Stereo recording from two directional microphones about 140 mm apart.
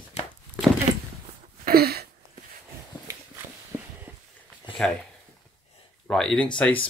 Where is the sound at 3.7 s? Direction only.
15° right (ahead or behind).